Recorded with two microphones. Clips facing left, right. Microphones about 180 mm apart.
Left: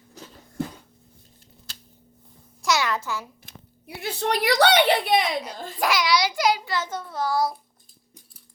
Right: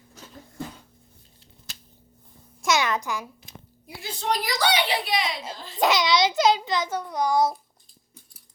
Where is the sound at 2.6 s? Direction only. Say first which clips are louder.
Even; 20° right (ahead or behind).